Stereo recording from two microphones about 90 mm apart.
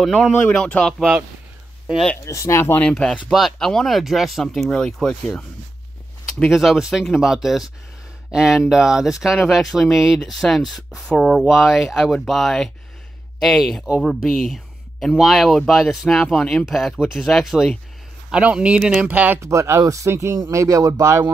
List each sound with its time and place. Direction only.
0.7 s speech: 10° left (ahead or behind)
2.2 s speech: 35° left (ahead or behind)
2.8 s speech: 10° left (ahead or behind)
6.5 s speech: 5° right (ahead or behind)
18.3 s speech: 10° right (ahead or behind)
19.4 s speech: 30° right (ahead or behind)